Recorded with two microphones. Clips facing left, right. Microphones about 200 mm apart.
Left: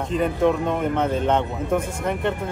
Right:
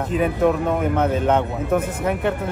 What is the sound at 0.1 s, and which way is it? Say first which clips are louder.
Speech: right 1 dB; 5° right (ahead or behind).